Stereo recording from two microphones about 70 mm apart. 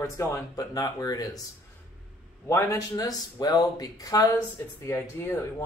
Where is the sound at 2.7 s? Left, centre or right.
Left.